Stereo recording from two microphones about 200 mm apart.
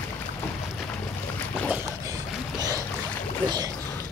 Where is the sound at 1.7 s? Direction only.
20° right (ahead or behind).